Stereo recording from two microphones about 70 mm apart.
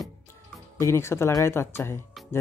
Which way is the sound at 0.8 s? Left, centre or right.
Left.